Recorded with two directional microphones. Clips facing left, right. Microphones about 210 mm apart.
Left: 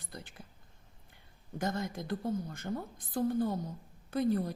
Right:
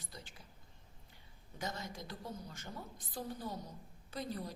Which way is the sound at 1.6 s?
50° left (ahead or behind).